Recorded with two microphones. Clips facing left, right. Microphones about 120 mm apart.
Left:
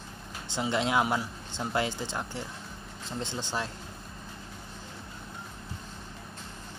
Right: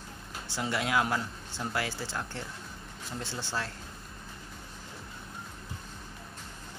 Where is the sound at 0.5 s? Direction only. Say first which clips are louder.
Left 3 dB; 20° left (ahead or behind).